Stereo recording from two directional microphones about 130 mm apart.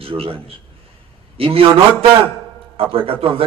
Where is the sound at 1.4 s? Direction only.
45° right (ahead or behind).